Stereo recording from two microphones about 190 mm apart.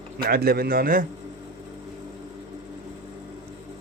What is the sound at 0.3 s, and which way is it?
Speech, 55° right (ahead or behind).